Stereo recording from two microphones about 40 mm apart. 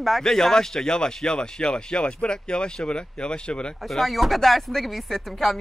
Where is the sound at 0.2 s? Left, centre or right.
Centre.